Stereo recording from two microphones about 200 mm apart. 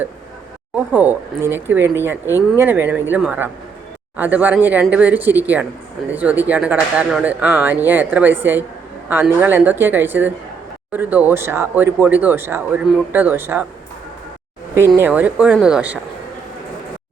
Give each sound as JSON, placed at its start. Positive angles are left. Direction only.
{"t": 0.9, "sound": "speech", "side_deg": -10}
{"t": 14.8, "sound": "speech", "side_deg": -10}